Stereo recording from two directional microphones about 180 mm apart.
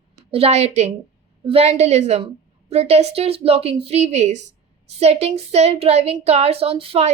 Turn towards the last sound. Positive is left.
turn(degrees=-30)  # may be behind; listen again after turning